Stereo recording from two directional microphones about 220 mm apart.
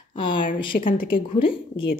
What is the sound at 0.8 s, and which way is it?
Speech, 40° left (ahead or behind).